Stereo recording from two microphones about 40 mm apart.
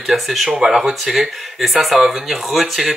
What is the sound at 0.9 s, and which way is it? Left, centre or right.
Speech, centre.